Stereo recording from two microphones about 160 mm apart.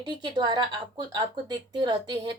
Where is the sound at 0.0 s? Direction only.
30° right (ahead or behind).